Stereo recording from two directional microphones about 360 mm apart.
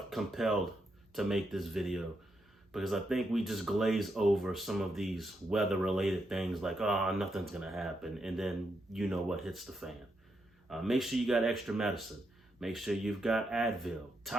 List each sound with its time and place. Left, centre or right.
0.1 s speech: centre